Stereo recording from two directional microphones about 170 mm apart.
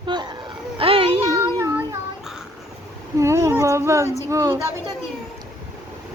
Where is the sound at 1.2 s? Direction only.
20° right (ahead or behind).